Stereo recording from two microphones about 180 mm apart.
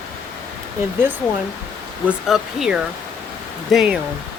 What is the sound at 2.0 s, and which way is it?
Speech, centre (ahead or behind).